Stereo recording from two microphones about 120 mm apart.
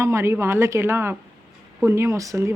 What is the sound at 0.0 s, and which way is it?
Speech, 25° right (ahead or behind).